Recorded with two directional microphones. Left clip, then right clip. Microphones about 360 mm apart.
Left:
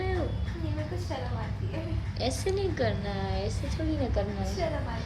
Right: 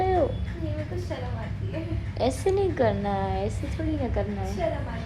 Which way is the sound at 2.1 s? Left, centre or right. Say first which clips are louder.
Right 6 dB; centre.